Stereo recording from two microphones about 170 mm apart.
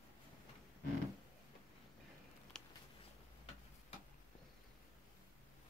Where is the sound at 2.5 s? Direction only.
5° left (ahead or behind).